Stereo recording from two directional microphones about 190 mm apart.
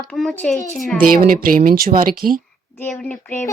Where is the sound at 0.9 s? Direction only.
50° right (ahead or behind).